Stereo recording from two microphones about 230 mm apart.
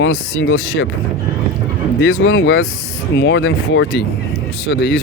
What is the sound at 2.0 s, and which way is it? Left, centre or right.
Speech, left.